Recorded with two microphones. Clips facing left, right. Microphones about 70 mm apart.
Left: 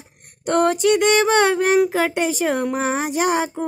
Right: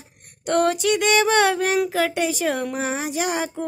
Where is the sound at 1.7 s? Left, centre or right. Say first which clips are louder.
Left 3 dB; left.